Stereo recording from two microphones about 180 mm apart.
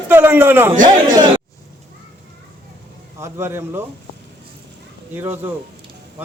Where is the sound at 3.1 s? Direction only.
15° right (ahead or behind).